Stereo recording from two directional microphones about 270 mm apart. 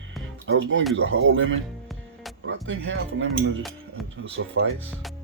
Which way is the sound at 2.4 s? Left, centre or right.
Right.